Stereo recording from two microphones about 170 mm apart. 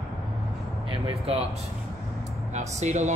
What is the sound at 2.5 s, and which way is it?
Speech, 40° right (ahead or behind).